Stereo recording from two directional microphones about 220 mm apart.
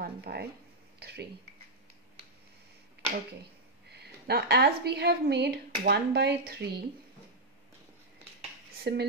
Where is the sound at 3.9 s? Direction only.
45° right (ahead or behind).